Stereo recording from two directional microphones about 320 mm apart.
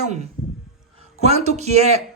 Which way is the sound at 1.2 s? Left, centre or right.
Centre.